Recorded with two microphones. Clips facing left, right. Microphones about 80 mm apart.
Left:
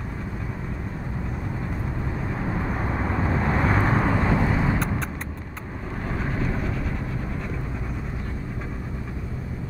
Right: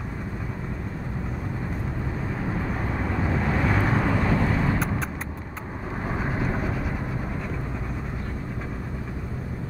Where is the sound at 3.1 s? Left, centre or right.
Left.